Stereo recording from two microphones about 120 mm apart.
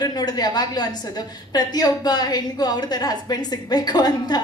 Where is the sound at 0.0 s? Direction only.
35° left (ahead or behind).